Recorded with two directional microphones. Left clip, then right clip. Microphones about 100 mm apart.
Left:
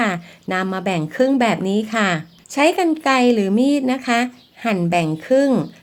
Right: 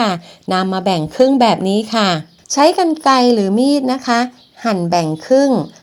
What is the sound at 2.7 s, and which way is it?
Speech, 25° right (ahead or behind).